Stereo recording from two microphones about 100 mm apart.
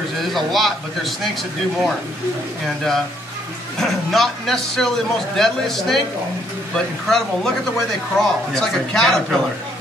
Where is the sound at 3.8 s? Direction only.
Centre (ahead or behind).